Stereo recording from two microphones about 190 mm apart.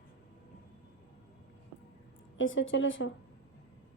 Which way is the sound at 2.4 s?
90° left.